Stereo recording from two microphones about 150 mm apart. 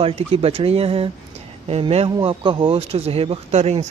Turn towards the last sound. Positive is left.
turn(degrees=-45)  # may be behind; listen again after turning